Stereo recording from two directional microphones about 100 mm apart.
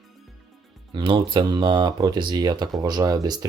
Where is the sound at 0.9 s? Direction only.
50° right (ahead or behind).